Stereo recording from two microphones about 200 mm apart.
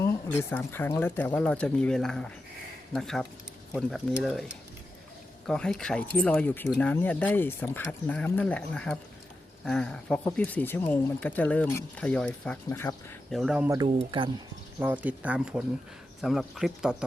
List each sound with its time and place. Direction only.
0.0 s speech: 10° left (ahead or behind)
5.5 s speech: 5° left (ahead or behind)
13.3 s speech: centre (ahead or behind)
13.8 s speech: 25° right (ahead or behind)
15.0 s speech: 10° right (ahead or behind)